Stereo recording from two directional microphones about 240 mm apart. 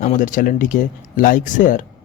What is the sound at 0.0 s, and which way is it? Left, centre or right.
Speech, left.